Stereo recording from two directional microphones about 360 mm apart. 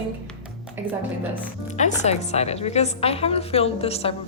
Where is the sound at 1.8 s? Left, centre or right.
Centre.